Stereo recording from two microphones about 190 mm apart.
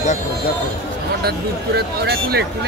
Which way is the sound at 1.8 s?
55° right (ahead or behind).